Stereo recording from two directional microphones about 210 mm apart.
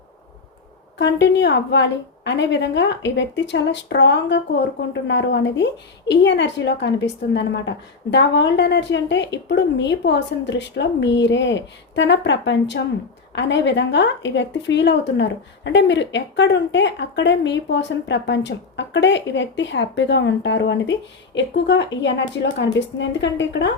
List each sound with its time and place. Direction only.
0.9 s speech: 60° left (ahead or behind)